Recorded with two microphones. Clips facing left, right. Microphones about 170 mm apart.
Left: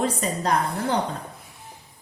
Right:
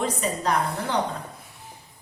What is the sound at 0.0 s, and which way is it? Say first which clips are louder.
Speech: left 1 dB; 40° left (ahead or behind).